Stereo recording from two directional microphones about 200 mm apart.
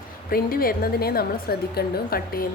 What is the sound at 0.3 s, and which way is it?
A woman's voice, 45° left (ahead or behind).